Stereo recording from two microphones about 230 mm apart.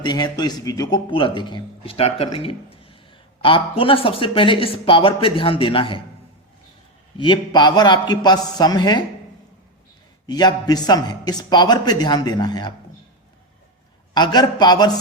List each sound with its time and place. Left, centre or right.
0.0 s a man's voice: centre
7.2 s a man's voice: centre
10.2 s a man's voice: centre
14.1 s a man's voice: centre